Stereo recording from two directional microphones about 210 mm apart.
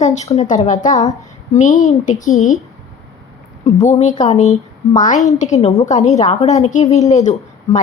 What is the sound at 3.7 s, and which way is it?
A woman's voice, 35° left (ahead or behind).